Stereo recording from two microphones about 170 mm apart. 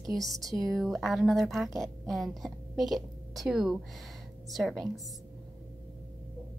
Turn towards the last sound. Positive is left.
turn(degrees=0)  # may be behind; listen again after turning